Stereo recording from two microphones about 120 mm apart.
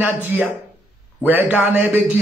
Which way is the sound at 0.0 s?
15° right (ahead or behind).